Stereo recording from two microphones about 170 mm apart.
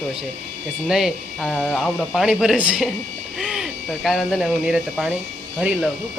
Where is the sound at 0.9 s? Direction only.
Centre (ahead or behind).